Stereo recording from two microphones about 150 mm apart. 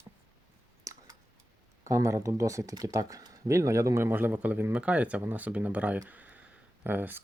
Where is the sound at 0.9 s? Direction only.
20° right (ahead or behind).